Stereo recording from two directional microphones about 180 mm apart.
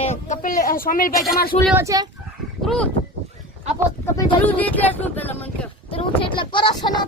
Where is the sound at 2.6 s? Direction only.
Centre (ahead or behind).